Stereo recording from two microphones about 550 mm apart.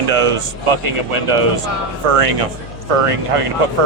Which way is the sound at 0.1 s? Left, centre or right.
Right.